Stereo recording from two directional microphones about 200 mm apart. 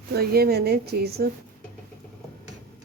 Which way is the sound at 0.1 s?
50° right (ahead or behind).